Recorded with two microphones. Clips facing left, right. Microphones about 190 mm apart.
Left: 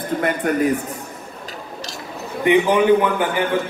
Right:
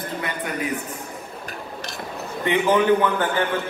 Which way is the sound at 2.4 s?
15° left (ahead or behind).